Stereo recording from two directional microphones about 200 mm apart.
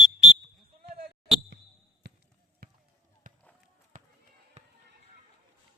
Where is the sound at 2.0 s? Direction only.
55° right (ahead or behind).